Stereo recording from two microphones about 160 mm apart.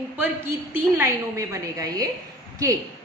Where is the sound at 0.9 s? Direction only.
20° right (ahead or behind).